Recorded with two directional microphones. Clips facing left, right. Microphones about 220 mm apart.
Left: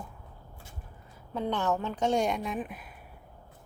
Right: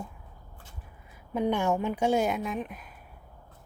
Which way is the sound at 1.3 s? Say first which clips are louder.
Right 3 dB; 15° right (ahead or behind).